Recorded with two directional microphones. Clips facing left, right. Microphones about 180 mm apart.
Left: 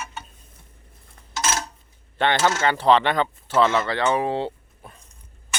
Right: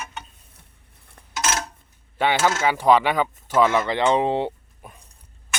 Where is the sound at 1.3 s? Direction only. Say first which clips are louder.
Even; centre (ahead or behind).